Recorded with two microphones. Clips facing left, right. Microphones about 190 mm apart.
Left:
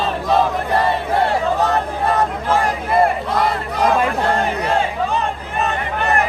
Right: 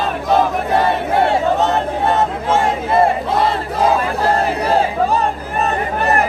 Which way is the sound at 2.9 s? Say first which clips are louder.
Right 1 dB; 25° right (ahead or behind).